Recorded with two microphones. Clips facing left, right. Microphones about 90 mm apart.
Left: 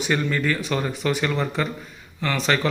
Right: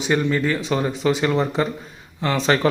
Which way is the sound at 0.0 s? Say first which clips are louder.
Right 3 dB; 20° right (ahead or behind).